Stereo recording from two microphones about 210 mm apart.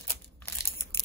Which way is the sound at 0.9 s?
10° left (ahead or behind).